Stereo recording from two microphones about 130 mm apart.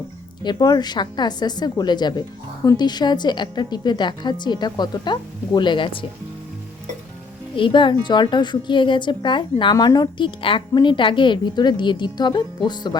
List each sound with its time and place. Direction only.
0.4 s speech: 30° left (ahead or behind)
7.5 s speech: 40° left (ahead or behind)